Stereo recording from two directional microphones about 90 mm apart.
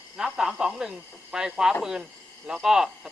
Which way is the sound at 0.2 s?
5° right (ahead or behind).